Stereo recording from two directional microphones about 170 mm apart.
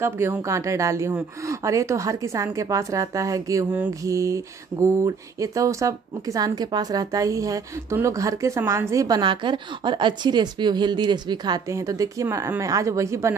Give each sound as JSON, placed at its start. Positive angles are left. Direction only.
{"t": 0.0, "sound": "speech", "side_deg": -15}